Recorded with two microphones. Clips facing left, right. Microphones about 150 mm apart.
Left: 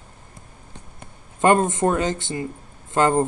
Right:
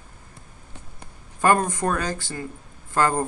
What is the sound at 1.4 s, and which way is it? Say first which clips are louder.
Speech: left 3 dB; 20° left (ahead or behind).